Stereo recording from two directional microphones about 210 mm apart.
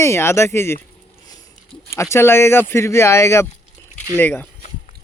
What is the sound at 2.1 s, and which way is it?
Speech, 10° left (ahead or behind).